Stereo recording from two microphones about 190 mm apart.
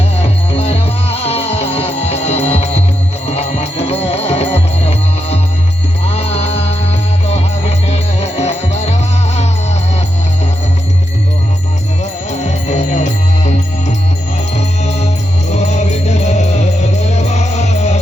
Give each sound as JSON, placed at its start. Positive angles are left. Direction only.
{"t": 0.2, "sound": "music", "side_deg": 35}
{"t": 12.3, "sound": "music", "side_deg": 40}